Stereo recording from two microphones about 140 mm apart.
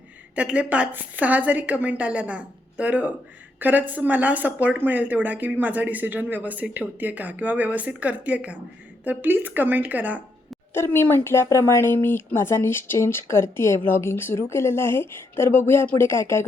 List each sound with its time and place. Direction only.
0.3 s speech: 10° right (ahead or behind)
10.8 s speech: 15° left (ahead or behind)